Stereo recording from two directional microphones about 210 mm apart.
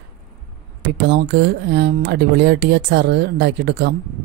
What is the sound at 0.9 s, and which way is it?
Speech, 55° right (ahead or behind).